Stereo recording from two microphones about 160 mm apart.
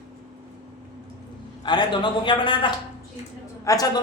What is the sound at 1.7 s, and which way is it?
A man's voice, 30° left (ahead or behind).